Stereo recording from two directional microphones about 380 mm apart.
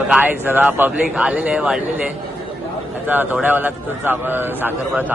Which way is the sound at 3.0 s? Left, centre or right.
Centre.